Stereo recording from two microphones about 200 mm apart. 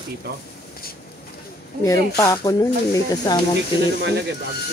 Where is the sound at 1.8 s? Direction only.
15° left (ahead or behind).